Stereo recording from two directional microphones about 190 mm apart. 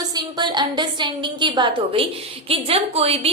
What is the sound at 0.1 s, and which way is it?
A woman's voice, 20° right (ahead or behind).